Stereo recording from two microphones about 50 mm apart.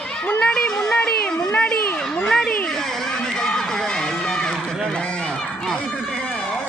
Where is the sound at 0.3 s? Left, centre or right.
Left.